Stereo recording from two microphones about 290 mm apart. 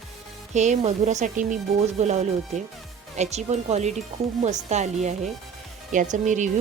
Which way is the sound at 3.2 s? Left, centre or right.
Right.